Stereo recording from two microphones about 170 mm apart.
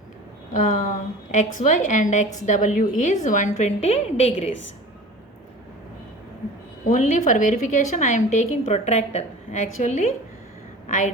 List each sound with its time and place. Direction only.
0.5 s a woman's voice: 45° left (ahead or behind)
6.8 s a woman's voice: 45° left (ahead or behind)